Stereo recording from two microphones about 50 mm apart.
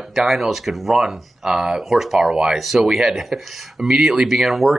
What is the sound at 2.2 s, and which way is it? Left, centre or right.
Speech, right.